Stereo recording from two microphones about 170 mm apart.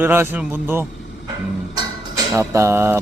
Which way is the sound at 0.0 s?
10° right (ahead or behind).